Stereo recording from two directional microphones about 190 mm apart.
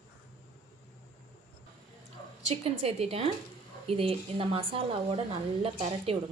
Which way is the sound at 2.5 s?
30° right (ahead or behind).